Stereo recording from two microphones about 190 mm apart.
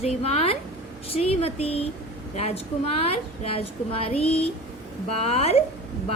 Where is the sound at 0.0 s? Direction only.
35° left (ahead or behind).